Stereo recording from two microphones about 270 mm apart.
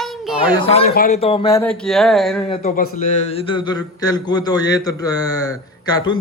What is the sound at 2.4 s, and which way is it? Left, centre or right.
A man's voice, left.